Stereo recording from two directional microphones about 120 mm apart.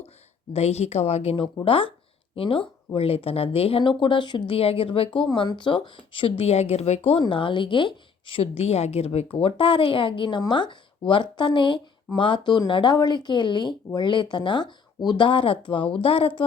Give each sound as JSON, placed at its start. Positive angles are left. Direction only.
{"t": 0.5, "sound": "a woman's voice", "side_deg": 65}
{"t": 1.6, "sound": "speech", "side_deg": 45}
{"t": 7.2, "sound": "speech", "side_deg": 45}